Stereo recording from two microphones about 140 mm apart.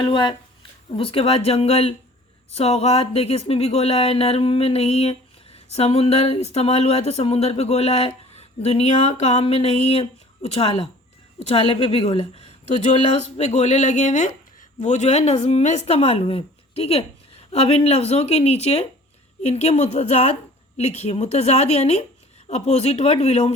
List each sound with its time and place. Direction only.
0.0 s speech: 35° left (ahead or behind)